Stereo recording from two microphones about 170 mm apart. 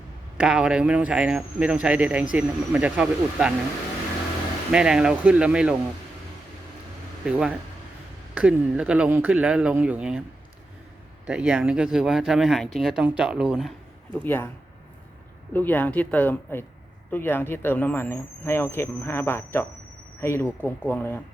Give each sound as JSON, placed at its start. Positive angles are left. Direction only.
{"t": 0.3, "sound": "speech", "side_deg": -5}
{"t": 4.7, "sound": "speech", "side_deg": -5}
{"t": 7.3, "sound": "speech", "side_deg": -5}
{"t": 11.3, "sound": "speech", "side_deg": -5}
{"t": 14.3, "sound": "speech", "side_deg": 10}
{"t": 15.5, "sound": "speech", "side_deg": 10}